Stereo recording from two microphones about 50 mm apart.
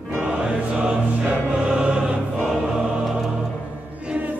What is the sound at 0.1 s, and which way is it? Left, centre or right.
Music, right.